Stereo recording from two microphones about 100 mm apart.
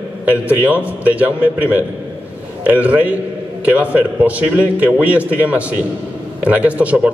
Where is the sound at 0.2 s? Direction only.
15° right (ahead or behind).